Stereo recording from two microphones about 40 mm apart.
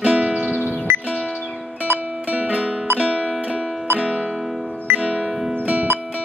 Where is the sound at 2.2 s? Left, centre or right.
Right.